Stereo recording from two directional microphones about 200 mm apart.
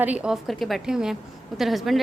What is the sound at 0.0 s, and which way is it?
A woman's voice, 5° right (ahead or behind).